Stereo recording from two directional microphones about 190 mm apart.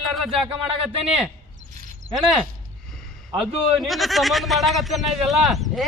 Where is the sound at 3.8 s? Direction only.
Centre (ahead or behind).